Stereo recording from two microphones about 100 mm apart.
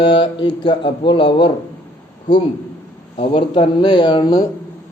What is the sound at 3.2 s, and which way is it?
Speech, 65° left (ahead or behind).